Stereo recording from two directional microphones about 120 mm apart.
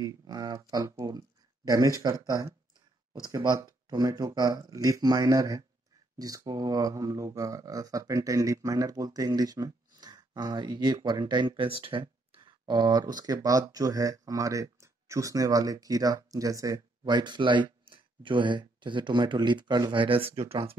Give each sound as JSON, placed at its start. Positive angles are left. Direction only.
{"t": 0.0, "sound": "speech", "side_deg": -30}
{"t": 17.0, "sound": "speech", "side_deg": -40}